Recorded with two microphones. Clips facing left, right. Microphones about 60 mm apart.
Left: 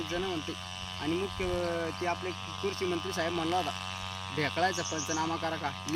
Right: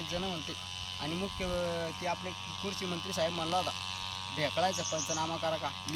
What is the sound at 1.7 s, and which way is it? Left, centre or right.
Speech, left.